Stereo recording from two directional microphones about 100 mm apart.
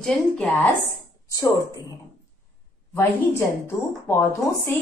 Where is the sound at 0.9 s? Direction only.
35° left (ahead or behind).